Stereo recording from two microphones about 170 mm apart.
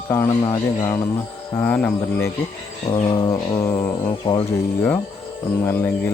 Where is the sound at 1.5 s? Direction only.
10° left (ahead or behind).